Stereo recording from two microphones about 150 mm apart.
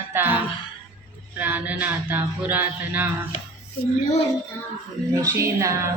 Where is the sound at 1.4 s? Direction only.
10° right (ahead or behind).